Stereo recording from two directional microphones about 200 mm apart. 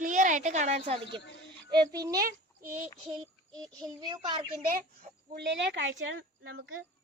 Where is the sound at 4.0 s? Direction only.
20° right (ahead or behind).